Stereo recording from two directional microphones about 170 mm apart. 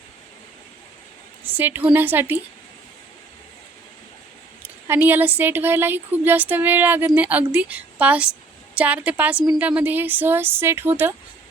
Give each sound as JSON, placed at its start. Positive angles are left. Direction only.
{"t": 1.5, "sound": "a woman's voice", "side_deg": -10}
{"t": 4.6, "sound": "a woman's voice", "side_deg": -10}